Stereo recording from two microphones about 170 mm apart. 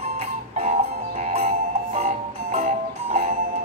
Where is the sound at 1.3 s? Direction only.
40° right (ahead or behind).